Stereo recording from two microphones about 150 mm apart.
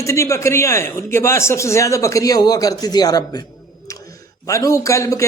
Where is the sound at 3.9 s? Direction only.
20° left (ahead or behind).